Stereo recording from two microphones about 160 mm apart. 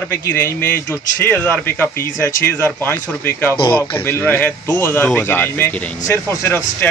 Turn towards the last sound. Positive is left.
turn(degrees=15)  # may be behind; listen again after turning